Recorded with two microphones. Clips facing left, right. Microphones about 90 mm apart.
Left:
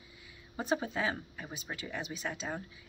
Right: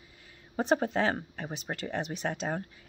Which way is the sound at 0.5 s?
60° right (ahead or behind).